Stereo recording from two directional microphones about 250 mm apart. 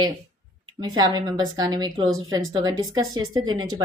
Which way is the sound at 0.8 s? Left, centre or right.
Centre.